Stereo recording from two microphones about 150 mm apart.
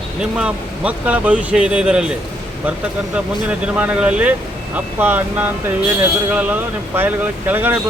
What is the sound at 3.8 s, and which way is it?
Speech, 10° right (ahead or behind).